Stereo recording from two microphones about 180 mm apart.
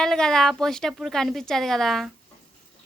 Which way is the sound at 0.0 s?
5° left (ahead or behind).